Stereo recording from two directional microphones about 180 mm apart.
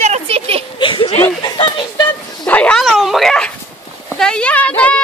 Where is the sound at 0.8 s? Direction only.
30° left (ahead or behind).